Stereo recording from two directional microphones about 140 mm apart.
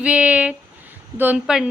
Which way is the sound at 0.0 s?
10° right (ahead or behind).